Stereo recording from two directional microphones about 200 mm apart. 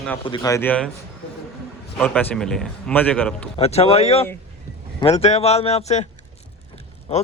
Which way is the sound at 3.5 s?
30° left (ahead or behind).